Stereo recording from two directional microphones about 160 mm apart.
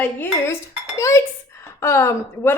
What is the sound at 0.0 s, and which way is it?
A woman's voice, 10° left (ahead or behind).